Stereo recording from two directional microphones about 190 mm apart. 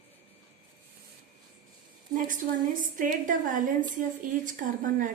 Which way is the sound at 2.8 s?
45° right (ahead or behind).